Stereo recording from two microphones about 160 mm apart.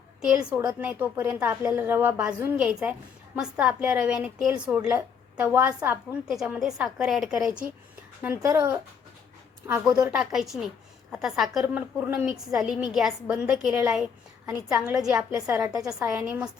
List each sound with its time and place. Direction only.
0.6 s a woman's voice: 5° right (ahead or behind)
8.4 s a woman's voice: 15° right (ahead or behind)
15.1 s a woman's voice: 20° right (ahead or behind)
15.8 s a woman's voice: 5° right (ahead or behind)